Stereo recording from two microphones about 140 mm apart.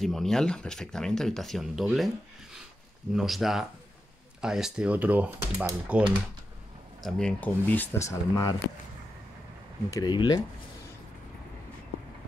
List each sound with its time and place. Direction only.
0.0 s speech: centre (ahead or behind)
7.0 s speech: 5° left (ahead or behind); by 8.5 s 25° left (ahead or behind)
9.8 s speech: 30° left (ahead or behind)